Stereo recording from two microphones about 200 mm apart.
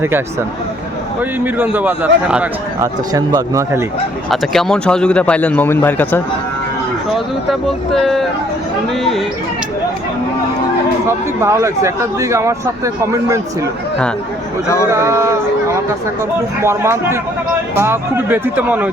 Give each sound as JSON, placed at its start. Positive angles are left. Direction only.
{"t": 0.0, "sound": "speech", "side_deg": -10}
{"t": 3.1, "sound": "speech", "side_deg": -15}
{"t": 4.3, "sound": "a man's voice", "side_deg": 0}
{"t": 7.5, "sound": "speech", "side_deg": 0}
{"t": 11.3, "sound": "speech", "side_deg": -15}
{"t": 14.8, "sound": "speech", "side_deg": -15}
{"t": 16.6, "sound": "speech", "side_deg": -15}